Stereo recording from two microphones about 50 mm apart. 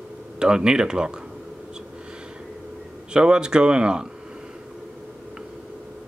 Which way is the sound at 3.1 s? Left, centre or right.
Centre.